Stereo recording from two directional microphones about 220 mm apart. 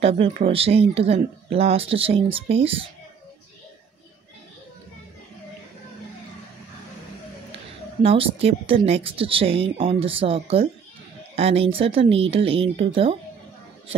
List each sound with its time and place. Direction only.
0.0 s a woman's voice: 25° right (ahead or behind)
7.5 s a woman's voice: 25° right (ahead or behind)